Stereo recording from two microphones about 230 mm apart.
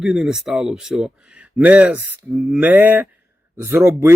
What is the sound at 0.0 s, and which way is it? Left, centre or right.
Speech, centre.